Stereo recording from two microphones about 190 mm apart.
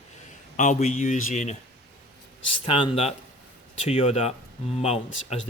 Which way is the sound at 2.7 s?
25° left (ahead or behind).